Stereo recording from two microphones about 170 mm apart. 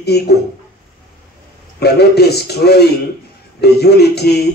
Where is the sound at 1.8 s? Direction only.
70° left (ahead or behind).